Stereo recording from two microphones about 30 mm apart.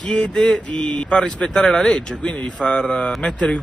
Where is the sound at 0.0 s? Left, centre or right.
Left.